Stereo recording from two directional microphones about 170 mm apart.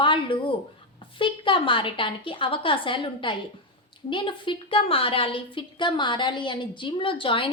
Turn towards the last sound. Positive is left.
turn(degrees=30)  # may be behind; listen again after turning